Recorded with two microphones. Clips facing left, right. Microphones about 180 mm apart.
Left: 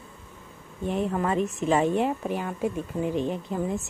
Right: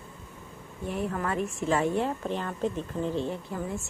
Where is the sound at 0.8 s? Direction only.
20° left (ahead or behind).